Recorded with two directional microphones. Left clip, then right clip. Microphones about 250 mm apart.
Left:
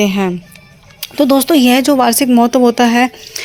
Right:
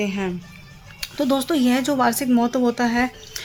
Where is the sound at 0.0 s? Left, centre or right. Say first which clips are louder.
Left 10 dB; left.